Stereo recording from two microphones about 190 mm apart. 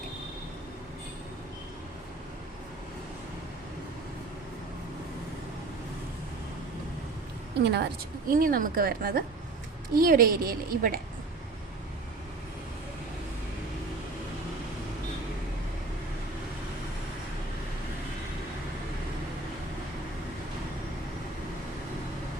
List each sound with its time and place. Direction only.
7.6 s a woman's voice: 60° right (ahead or behind)
8.3 s a woman's voice: 45° right (ahead or behind)